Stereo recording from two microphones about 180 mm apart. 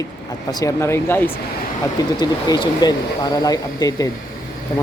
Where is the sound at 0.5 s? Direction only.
20° left (ahead or behind).